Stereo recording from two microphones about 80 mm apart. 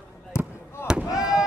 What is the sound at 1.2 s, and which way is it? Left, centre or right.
Fireworks, centre.